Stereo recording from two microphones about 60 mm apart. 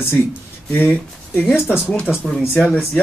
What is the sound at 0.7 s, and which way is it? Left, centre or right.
Speech, left.